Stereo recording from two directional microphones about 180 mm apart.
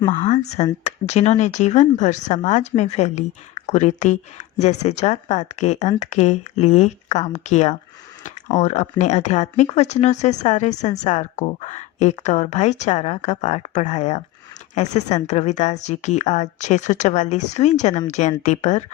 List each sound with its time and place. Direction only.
0.1 s speech: 40° left (ahead or behind)